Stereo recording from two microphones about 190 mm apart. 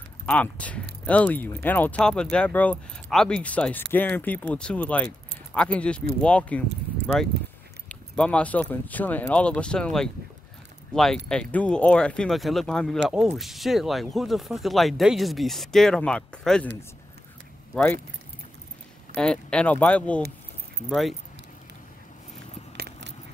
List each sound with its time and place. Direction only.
0.3 s speech: 5° left (ahead or behind)
7.9 s speech: 5° left (ahead or behind)
19.1 s speech: 5° left (ahead or behind)
22.8 s biting: 60° right (ahead or behind)